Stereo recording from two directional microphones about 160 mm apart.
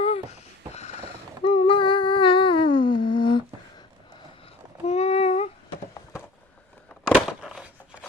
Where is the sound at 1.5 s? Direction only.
35° left (ahead or behind).